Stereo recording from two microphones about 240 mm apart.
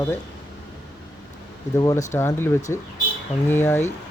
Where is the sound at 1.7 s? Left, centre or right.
Centre.